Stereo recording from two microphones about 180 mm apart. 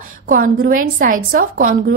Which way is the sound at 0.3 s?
55° right (ahead or behind).